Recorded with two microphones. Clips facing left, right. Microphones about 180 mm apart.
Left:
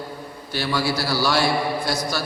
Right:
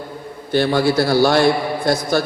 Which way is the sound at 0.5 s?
55° right (ahead or behind).